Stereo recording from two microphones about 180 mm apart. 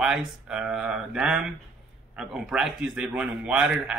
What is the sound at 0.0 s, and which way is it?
A man's voice, 5° right (ahead or behind).